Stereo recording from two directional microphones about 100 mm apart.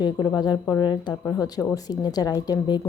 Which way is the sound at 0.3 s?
45° left (ahead or behind).